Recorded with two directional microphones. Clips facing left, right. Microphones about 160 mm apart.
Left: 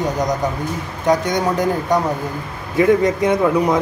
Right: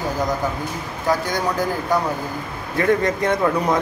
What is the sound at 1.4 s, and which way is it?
Speech, 20° left (ahead or behind).